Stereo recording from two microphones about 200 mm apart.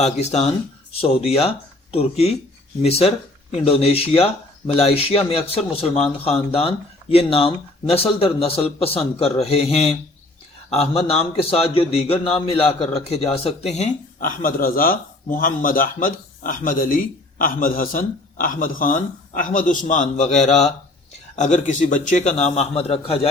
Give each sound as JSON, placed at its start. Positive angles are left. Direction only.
{"t": 0.0, "sound": "a man's voice", "side_deg": 35}